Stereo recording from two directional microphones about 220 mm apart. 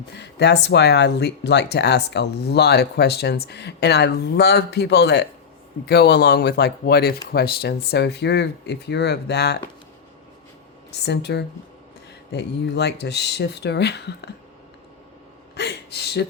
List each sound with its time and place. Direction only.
0.2 s speech: 50° left (ahead or behind)
10.9 s speech: 50° left (ahead or behind)
15.5 s a sound: 50° left (ahead or behind)